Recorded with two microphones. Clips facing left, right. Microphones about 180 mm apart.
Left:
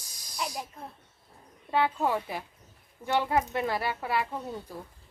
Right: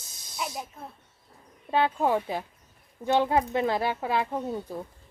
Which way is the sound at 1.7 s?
20° right (ahead or behind).